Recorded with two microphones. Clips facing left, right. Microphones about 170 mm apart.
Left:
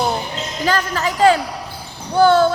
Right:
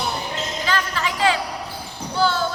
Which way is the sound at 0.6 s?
40° left (ahead or behind).